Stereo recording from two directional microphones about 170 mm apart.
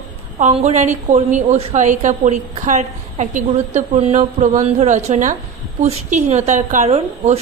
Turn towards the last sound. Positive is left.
turn(degrees=-40)  # may be behind; listen again after turning